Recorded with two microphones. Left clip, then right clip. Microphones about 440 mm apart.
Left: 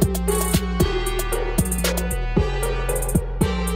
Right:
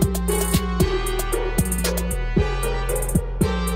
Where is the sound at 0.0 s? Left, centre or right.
Centre.